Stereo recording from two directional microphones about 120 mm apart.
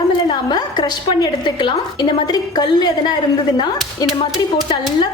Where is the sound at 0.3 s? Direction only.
35° left (ahead or behind).